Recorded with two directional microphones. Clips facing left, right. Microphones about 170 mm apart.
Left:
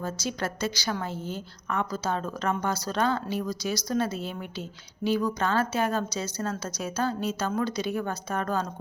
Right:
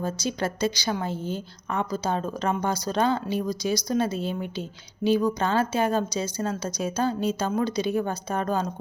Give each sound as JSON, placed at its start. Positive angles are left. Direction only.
{"t": 0.2, "sound": "a woman's voice", "side_deg": -20}